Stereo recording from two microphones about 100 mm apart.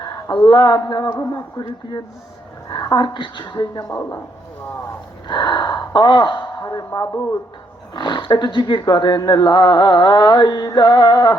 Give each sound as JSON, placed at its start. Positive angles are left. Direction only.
{"t": 0.0, "sound": "a sound", "side_deg": 45}
{"t": 0.4, "sound": "speech", "side_deg": 45}
{"t": 3.8, "sound": "speech", "side_deg": 30}
{"t": 5.3, "sound": "speech", "side_deg": 50}
{"t": 6.7, "sound": "speech", "side_deg": 35}
{"t": 7.1, "sound": "speech", "side_deg": 20}
{"t": 7.9, "sound": "speech", "side_deg": 50}